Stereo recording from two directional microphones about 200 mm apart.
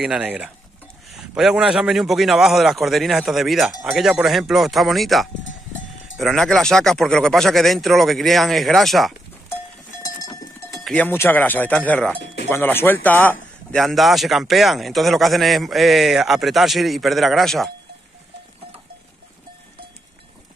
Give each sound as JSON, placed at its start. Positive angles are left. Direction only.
{"t": 0.0, "sound": "a man's voice", "side_deg": 0}
{"t": 10.0, "sound": "goat", "side_deg": 15}
{"t": 10.8, "sound": "a man's voice", "side_deg": 5}